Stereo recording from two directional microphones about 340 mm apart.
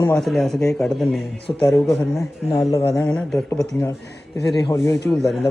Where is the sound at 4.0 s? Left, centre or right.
Left.